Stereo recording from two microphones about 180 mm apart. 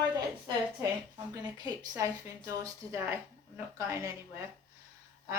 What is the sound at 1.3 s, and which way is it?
Speech, 20° right (ahead or behind).